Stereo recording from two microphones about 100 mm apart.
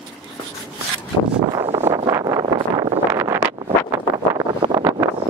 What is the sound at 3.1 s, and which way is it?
Wind noise, 25° right (ahead or behind).